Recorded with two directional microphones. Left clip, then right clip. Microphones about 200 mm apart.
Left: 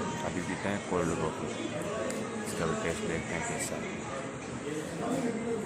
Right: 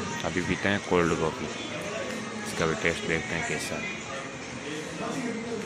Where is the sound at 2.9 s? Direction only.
15° right (ahead or behind).